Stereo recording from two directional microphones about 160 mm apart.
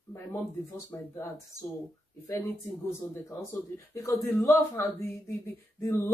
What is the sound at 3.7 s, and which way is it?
Speech, 20° left (ahead or behind).